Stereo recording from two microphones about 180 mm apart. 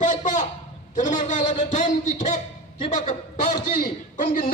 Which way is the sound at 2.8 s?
40° left (ahead or behind).